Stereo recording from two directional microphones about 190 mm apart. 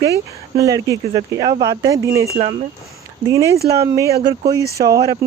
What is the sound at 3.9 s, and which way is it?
Speech, 15° right (ahead or behind).